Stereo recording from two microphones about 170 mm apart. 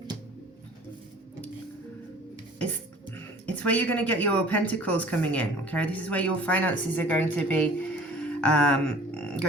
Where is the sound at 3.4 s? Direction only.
10° left (ahead or behind).